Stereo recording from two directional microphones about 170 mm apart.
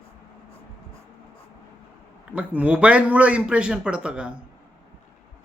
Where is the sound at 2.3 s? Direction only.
10° right (ahead or behind).